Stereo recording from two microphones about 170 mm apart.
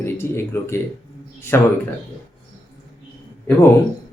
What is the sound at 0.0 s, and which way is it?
Speech, 15° left (ahead or behind).